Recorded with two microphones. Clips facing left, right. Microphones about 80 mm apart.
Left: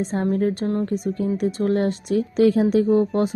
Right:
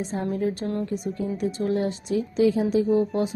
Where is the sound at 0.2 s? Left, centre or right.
Left.